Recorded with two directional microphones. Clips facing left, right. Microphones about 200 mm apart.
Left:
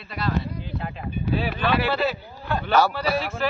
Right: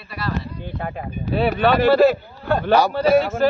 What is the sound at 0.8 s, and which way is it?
Speech, 50° right (ahead or behind).